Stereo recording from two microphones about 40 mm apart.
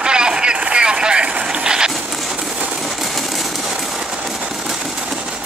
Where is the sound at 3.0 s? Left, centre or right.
Centre.